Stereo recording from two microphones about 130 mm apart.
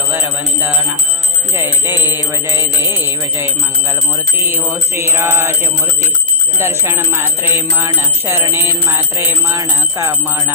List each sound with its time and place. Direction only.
1.5 s music: 20° right (ahead or behind)
6.6 s music: 20° right (ahead or behind)